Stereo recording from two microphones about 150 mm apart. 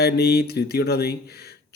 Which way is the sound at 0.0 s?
90° left.